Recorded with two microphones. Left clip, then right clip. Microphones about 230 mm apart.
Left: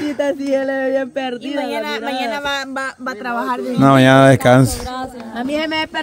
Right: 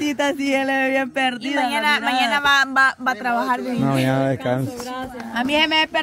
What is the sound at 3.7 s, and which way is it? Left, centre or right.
Speech, left.